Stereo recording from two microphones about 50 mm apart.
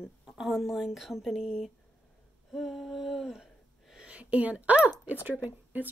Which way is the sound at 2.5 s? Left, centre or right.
Centre.